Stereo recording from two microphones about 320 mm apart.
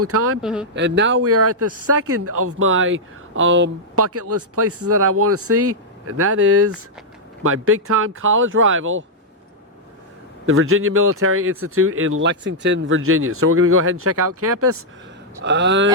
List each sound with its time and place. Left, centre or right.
0.0 s speech: right
0.4 s speech: centre
0.7 s speech: right
10.4 s speech: right
15.4 s speech: right